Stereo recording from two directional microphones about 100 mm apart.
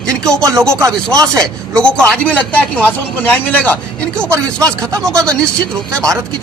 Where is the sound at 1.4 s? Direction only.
10° left (ahead or behind).